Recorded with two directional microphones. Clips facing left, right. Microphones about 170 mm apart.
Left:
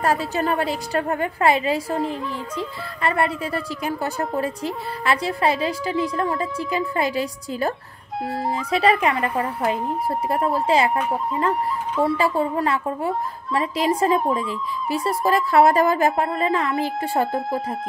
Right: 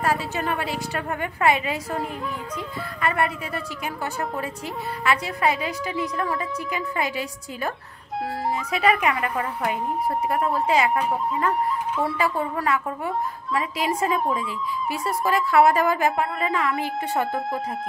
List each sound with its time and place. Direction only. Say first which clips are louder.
0.0 s speech: left 3 dB; 40° left (ahead or behind)
12.2 s speech: left 4 dB; 30° left (ahead or behind)
17.3 s speech: left 2 dB; centre (ahead or behind)